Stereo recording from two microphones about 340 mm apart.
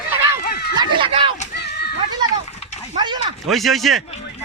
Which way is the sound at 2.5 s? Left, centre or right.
Centre.